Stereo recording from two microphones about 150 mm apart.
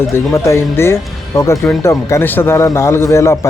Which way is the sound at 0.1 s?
20° left (ahead or behind).